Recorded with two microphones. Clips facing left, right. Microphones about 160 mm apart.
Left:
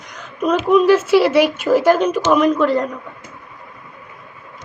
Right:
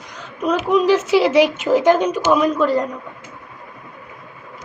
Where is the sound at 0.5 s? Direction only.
20° right (ahead or behind).